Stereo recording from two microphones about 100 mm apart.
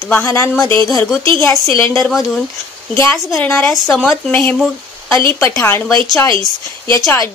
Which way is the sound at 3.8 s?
5° left (ahead or behind).